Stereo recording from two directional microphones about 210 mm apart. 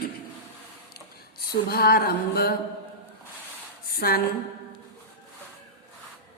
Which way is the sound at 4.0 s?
45° left (ahead or behind).